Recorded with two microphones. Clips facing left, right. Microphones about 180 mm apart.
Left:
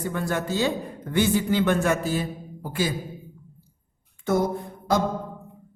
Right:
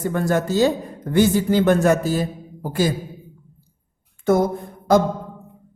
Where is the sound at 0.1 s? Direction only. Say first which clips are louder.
Right 7 dB; 45° right (ahead or behind).